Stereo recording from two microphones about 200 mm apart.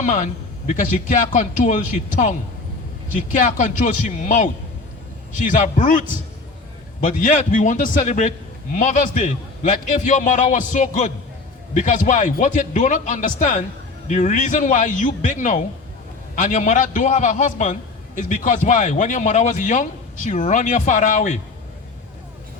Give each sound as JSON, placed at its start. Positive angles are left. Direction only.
{"t": 0.0, "sound": "a man's voice", "side_deg": 40}
{"t": 5.5, "sound": "a man's voice", "side_deg": 40}